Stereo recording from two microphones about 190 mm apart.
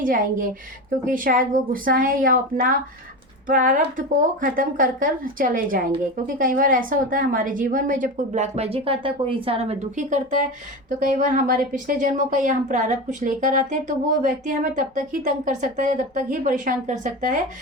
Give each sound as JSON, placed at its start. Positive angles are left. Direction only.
{"t": 0.0, "sound": "a woman's voice", "side_deg": -45}